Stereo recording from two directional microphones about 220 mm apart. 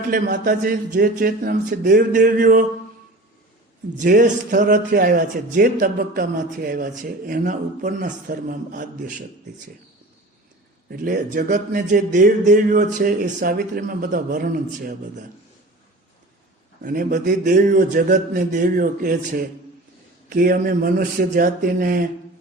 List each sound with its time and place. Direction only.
0.1 s a man's voice: 40° right (ahead or behind)
3.9 s a man's voice: 40° right (ahead or behind)
10.8 s a man's voice: 40° right (ahead or behind)
16.8 s a man's voice: 40° right (ahead or behind)